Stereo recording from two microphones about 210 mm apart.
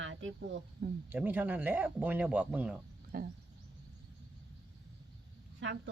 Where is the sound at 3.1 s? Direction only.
45° right (ahead or behind).